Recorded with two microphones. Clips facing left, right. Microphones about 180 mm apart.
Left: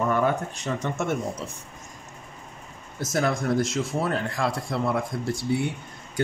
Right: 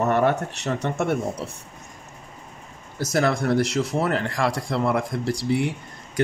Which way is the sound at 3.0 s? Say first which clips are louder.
Right 3 dB; 75° right (ahead or behind).